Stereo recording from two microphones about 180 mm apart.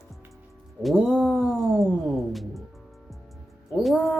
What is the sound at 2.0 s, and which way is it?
Speech, centre (ahead or behind).